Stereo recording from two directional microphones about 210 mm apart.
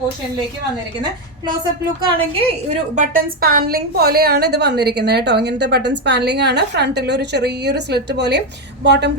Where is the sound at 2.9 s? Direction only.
35° right (ahead or behind).